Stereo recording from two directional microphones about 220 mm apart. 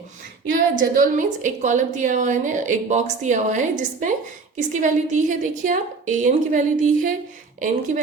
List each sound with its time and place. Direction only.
0.5 s a woman's voice: 40° right (ahead or behind)